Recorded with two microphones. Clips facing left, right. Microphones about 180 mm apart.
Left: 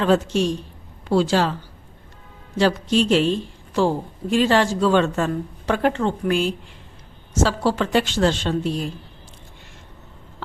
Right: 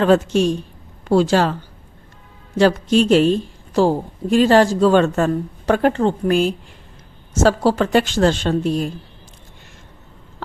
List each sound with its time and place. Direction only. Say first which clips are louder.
0.0 s a woman's voice: right 4 dB; 50° right (ahead or behind)
2.6 s a woman's voice: right 4 dB; 50° right (ahead or behind)